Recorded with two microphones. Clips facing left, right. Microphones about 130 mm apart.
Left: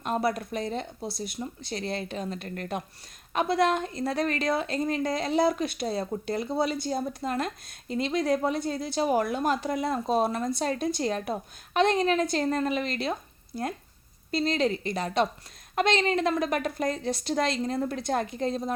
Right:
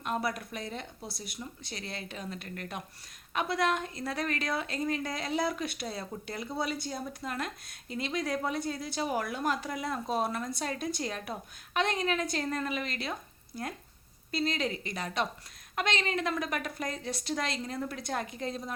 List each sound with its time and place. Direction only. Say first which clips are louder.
0.0 s a woman's voice: left 5 dB; 35° left (ahead or behind)
14.3 s a woman's voice: left 6 dB; 30° left (ahead or behind)